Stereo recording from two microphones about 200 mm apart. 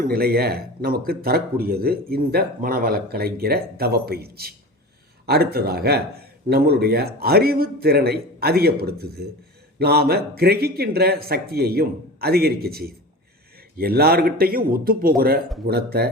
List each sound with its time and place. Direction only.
0.0 s a man's voice: 50° right (ahead or behind)